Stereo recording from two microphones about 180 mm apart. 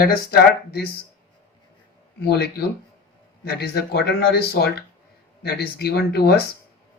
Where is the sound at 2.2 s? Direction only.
60° left (ahead or behind).